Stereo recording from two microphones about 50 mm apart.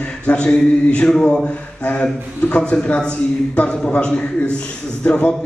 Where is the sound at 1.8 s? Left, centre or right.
Left.